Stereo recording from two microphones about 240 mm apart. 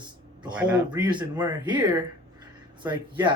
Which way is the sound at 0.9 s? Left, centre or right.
Centre.